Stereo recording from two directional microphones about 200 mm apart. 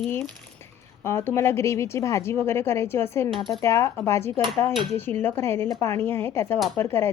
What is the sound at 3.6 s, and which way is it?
Speech, 15° left (ahead or behind).